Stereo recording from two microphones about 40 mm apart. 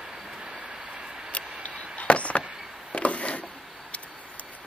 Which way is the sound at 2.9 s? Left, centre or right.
Left.